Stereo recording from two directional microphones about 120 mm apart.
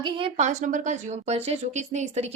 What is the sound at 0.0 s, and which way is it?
Speech, 50° right (ahead or behind).